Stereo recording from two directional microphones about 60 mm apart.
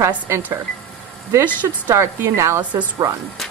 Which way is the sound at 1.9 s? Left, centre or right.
Right.